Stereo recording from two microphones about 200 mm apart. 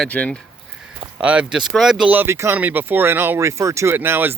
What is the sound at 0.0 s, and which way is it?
Speech, 5° left (ahead or behind).